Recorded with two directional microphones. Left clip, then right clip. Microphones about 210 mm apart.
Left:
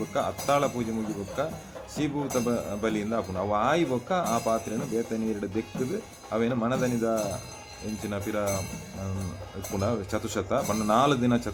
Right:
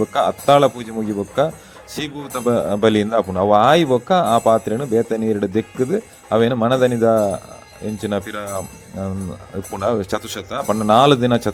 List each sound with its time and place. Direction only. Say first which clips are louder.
0.1 s speech: right 11 dB; 35° right (ahead or behind)
9.7 s speech: right 10 dB; 35° right (ahead or behind)